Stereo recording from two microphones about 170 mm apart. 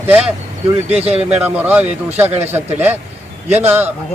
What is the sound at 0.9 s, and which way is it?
Speech, 35° right (ahead or behind).